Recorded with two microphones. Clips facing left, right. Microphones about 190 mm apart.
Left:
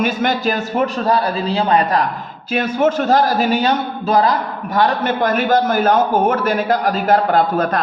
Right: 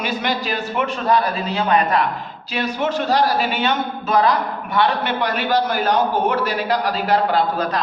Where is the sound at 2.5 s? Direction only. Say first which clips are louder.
Left 6 dB; 50° left (ahead or behind).